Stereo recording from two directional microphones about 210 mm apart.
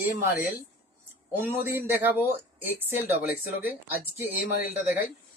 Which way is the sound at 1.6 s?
10° right (ahead or behind).